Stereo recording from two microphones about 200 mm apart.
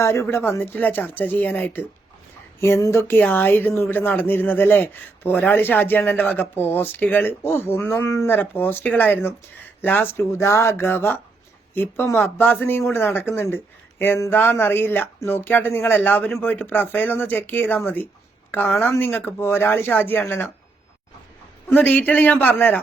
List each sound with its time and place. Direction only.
0.0 s speech: 15° left (ahead or behind)
21.7 s speech: 10° left (ahead or behind)